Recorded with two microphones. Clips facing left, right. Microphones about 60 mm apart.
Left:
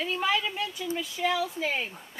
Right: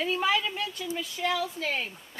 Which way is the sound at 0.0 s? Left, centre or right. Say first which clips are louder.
Right 1 dB; centre.